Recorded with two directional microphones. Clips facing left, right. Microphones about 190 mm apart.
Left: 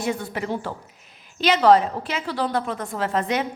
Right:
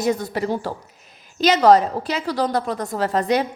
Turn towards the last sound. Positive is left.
turn(degrees=-35)  # may be behind; listen again after turning